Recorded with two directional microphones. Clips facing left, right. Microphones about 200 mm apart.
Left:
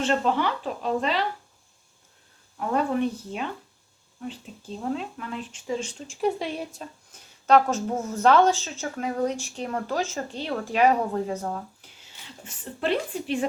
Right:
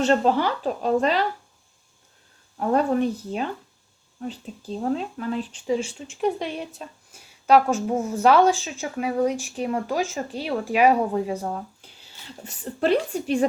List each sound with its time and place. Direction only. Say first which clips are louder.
0.0 s speech: right 4 dB; 40° right (ahead or behind)
2.6 s speech: right 4 dB; 40° right (ahead or behind)
6.7 s speech: right 1 dB; 10° right (ahead or behind)
12.5 s speech: right 5 dB; 40° right (ahead or behind)